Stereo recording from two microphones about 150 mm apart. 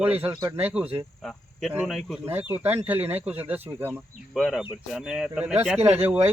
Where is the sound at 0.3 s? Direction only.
25° right (ahead or behind).